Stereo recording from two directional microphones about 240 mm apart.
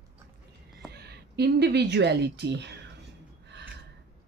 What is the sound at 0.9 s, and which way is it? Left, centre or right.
Speech, right.